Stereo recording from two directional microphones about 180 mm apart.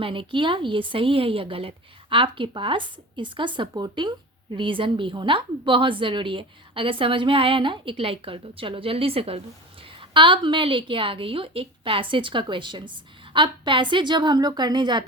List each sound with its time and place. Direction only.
0.0 s a woman's voice: 30° right (ahead or behind)